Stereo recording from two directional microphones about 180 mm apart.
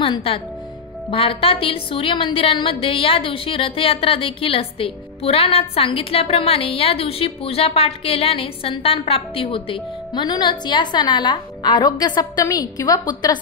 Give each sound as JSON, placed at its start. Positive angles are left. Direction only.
{"t": 0.0, "sound": "a woman's voice", "side_deg": 30}